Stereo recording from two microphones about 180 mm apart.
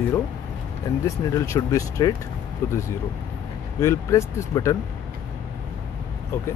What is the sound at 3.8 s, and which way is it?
Speech, 15° left (ahead or behind).